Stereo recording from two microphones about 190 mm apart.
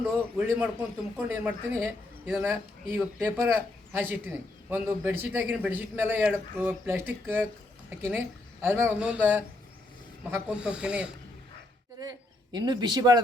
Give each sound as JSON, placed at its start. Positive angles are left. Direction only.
{"t": 0.0, "sound": "speech", "side_deg": -5}
{"t": 2.9, "sound": "speech", "side_deg": -15}
{"t": 11.9, "sound": "a man's voice", "side_deg": -20}